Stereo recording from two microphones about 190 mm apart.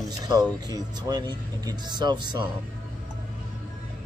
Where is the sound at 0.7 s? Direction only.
20° right (ahead or behind).